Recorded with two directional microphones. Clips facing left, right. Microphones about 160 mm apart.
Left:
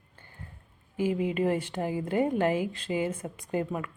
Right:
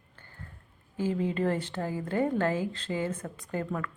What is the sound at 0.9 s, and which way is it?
A woman's voice, 15° left (ahead or behind).